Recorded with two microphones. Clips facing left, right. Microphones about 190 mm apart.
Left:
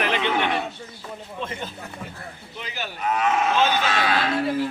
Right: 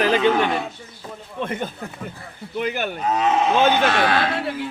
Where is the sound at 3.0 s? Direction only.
30° right (ahead or behind).